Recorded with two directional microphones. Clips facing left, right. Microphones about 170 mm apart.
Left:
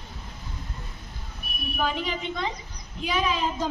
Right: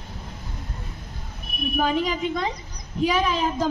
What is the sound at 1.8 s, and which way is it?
A woman's voice, 45° right (ahead or behind).